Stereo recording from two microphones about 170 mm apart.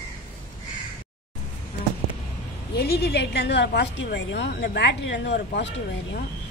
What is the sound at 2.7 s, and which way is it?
A woman's voice, 70° left (ahead or behind).